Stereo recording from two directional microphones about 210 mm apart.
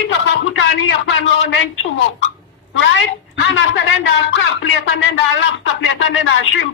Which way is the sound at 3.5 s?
65° left (ahead or behind).